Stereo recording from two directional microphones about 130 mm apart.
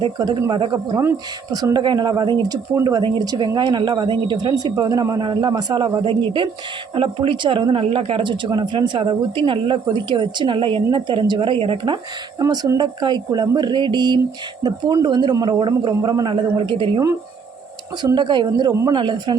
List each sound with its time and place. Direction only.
0.0 s a woman's voice: 30° right (ahead or behind)
0.9 s a woman's voice: 25° right (ahead or behind); by 11.9 s 45° right (ahead or behind)
12.4 s a woman's voice: 30° right (ahead or behind)
16.0 s a woman's voice: 30° right (ahead or behind)
18.0 s a woman's voice: 35° right (ahead or behind)